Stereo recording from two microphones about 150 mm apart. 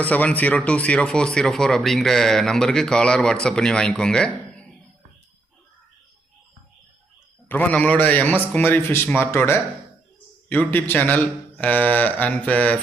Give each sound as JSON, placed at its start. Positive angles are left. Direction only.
{"t": 0.0, "sound": "speech", "side_deg": 10}
{"t": 7.4, "sound": "a man's voice", "side_deg": 10}